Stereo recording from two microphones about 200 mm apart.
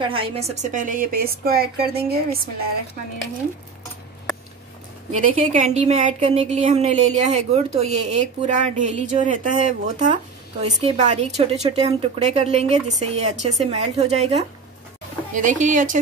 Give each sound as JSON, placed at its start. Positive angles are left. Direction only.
{"t": 0.0, "sound": "speech", "side_deg": -25}
{"t": 5.1, "sound": "a woman's voice", "side_deg": -35}
{"t": 15.3, "sound": "a woman's voice", "side_deg": -40}